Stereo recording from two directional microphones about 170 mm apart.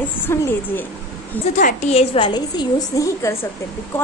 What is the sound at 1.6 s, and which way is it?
A woman's voice, 45° left (ahead or behind).